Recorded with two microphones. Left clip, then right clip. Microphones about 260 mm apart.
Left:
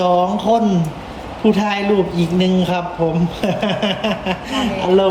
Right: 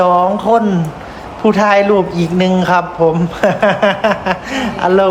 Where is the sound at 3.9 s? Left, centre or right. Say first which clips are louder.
Right 7 dB; right.